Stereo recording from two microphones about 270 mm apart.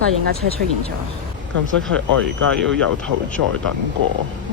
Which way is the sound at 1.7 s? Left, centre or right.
Right.